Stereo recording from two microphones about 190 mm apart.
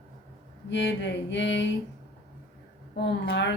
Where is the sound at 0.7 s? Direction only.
70° left (ahead or behind).